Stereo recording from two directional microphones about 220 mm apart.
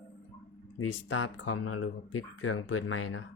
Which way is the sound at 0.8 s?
65° left (ahead or behind).